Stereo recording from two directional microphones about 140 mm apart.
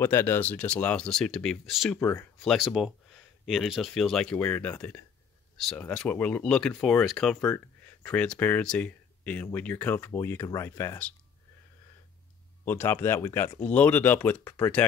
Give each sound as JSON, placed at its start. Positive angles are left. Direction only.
{"t": 0.0, "sound": "speech", "side_deg": 15}
{"t": 2.0, "sound": "speech", "side_deg": 15}
{"t": 2.4, "sound": "speech", "side_deg": 0}
{"t": 7.3, "sound": "speech", "side_deg": 20}
{"t": 8.0, "sound": "speech", "side_deg": 10}
{"t": 12.6, "sound": "speech", "side_deg": 15}